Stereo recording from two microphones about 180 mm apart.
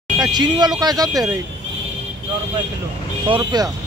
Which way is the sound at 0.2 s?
25° right (ahead or behind).